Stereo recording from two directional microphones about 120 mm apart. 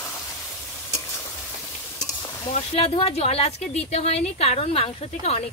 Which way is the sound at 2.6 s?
55° left (ahead or behind).